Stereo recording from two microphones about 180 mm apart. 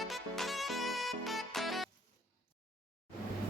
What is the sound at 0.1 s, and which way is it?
Music, centre (ahead or behind).